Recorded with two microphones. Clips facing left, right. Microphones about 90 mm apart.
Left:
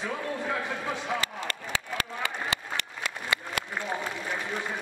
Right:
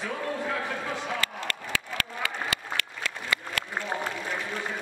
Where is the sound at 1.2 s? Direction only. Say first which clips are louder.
Right 1 dB; 20° left (ahead or behind).